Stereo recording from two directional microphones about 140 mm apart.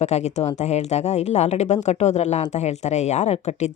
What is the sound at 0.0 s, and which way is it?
Speech, 55° left (ahead or behind).